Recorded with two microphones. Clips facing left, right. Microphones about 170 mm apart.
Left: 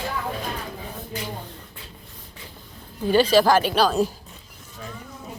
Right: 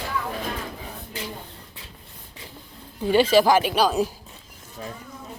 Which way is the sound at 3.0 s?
25° right (ahead or behind).